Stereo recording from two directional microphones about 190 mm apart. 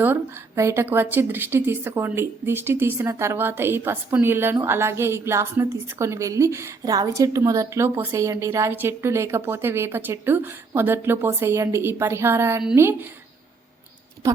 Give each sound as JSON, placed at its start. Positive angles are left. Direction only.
{"t": 0.0, "sound": "a woman's voice", "side_deg": -10}